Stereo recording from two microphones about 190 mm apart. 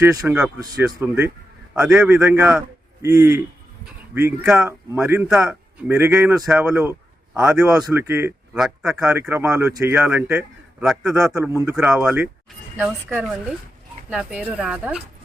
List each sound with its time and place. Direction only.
0.0 s a man's voice: 15° right (ahead or behind)
1.8 s a man's voice: 5° right (ahead or behind)
8.5 s a man's voice: centre (ahead or behind)